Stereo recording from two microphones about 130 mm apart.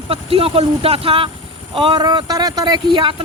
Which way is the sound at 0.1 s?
45° right (ahead or behind).